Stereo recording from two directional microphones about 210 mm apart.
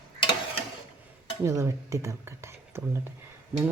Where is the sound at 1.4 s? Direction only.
15° right (ahead or behind).